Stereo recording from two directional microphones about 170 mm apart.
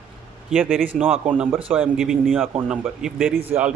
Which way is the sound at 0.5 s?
10° right (ahead or behind).